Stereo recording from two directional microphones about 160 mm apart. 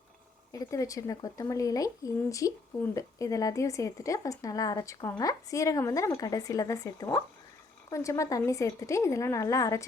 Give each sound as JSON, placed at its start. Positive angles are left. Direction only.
{"t": 0.5, "sound": "a woman's voice", "side_deg": 20}